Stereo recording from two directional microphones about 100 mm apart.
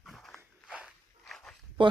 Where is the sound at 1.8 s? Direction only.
60° right (ahead or behind).